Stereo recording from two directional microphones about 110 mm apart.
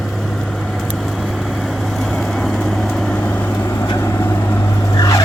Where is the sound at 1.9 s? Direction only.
5° left (ahead or behind).